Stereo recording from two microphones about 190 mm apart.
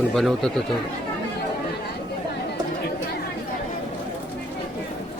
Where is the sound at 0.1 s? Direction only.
Centre (ahead or behind).